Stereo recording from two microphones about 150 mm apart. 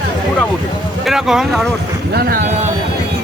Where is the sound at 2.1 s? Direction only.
90° right.